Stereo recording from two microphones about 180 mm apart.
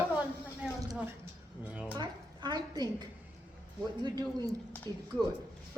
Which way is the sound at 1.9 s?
25° right (ahead or behind).